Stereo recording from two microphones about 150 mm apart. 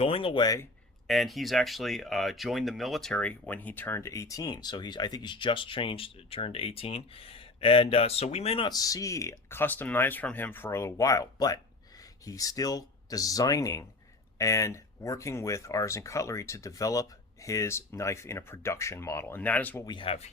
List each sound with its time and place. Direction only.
0.0 s speech: 40° left (ahead or behind)
1.0 s speech: centre (ahead or behind); by 8.7 s 40° left (ahead or behind)
8.7 s speech: 25° left (ahead or behind)
19.8 s speech: 30° left (ahead or behind)